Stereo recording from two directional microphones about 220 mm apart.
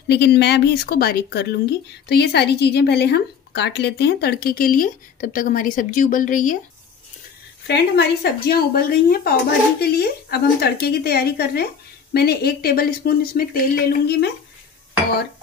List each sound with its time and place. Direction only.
0.1 s speech: 50° left (ahead or behind)
7.6 s speech: 50° left (ahead or behind)